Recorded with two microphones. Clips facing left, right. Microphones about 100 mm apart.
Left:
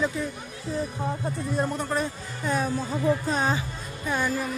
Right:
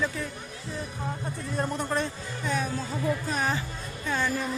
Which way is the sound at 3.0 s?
25° left (ahead or behind).